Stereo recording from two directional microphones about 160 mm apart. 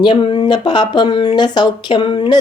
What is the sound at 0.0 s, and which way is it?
Speech, 30° left (ahead or behind).